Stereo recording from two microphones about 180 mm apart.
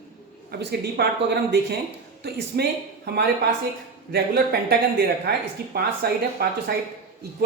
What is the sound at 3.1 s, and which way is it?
Speech, 60° right (ahead or behind).